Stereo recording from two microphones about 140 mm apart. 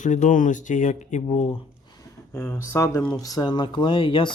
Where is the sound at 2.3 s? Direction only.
20° left (ahead or behind).